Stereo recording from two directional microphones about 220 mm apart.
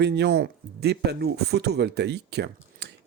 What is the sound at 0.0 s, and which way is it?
Speech, 50° right (ahead or behind).